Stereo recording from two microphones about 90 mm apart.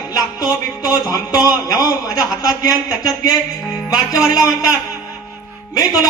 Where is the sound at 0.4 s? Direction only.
15° right (ahead or behind).